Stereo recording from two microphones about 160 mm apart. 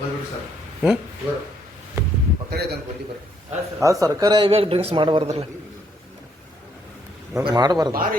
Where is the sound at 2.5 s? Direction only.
85° right.